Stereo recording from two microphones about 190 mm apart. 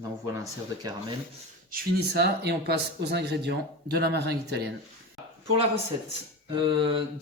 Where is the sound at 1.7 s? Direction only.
55° right (ahead or behind).